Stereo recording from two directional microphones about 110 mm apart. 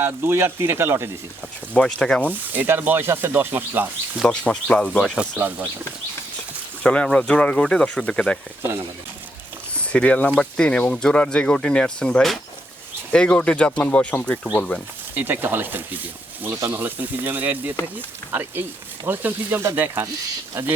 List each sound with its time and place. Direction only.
0.0 s speech: 20° right (ahead or behind)
1.7 s speech: 10° left (ahead or behind)
2.5 s speech: 20° right (ahead or behind)
4.3 s speech: 10° left (ahead or behind)
5.4 s speech: 15° right (ahead or behind)
6.8 s speech: 10° left (ahead or behind)
9.9 s speech: 10° left (ahead or behind)
15.1 s speech: 20° right (ahead or behind)